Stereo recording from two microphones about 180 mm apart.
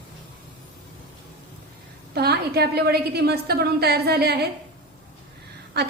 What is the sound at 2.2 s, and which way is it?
A woman's voice, 65° right (ahead or behind).